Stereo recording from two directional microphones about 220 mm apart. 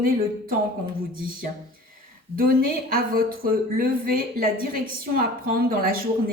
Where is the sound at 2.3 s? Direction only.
40° right (ahead or behind).